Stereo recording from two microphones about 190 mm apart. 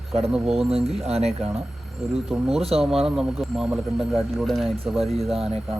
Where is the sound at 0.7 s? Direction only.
35° right (ahead or behind).